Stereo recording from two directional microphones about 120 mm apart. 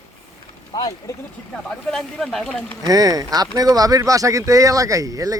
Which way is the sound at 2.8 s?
30° right (ahead or behind).